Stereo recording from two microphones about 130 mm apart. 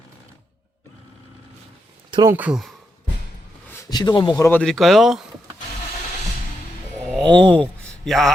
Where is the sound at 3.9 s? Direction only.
30° left (ahead or behind).